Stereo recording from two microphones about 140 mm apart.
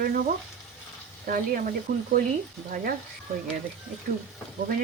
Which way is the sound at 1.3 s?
90° right.